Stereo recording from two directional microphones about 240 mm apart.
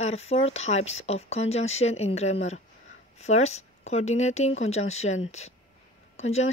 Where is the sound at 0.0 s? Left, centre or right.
Left.